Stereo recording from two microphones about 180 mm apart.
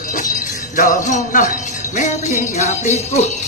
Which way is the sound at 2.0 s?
45° left (ahead or behind).